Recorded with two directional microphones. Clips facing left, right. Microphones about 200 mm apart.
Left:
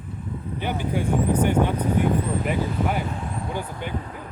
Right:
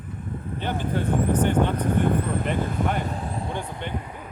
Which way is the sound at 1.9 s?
55° right (ahead or behind).